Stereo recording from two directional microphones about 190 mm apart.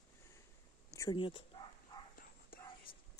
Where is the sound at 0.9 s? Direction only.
25° left (ahead or behind).